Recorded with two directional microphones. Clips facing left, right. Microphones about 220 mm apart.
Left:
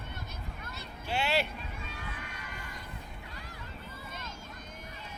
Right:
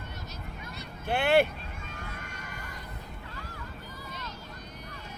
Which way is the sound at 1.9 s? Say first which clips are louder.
Right 1 dB; 50° right (ahead or behind).